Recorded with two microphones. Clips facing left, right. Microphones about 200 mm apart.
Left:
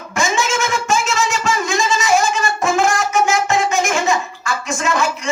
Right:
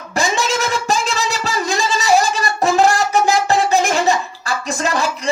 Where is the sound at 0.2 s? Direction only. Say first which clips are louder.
Even; 35° right (ahead or behind).